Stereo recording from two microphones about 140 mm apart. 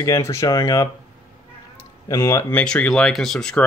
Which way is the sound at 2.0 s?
20° left (ahead or behind).